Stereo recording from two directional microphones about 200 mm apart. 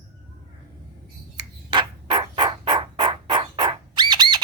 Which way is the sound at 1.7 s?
25° right (ahead or behind).